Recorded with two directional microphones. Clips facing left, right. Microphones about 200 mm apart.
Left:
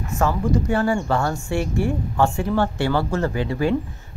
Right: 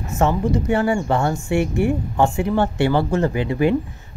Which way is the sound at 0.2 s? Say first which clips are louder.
Right 2 dB; 20° right (ahead or behind).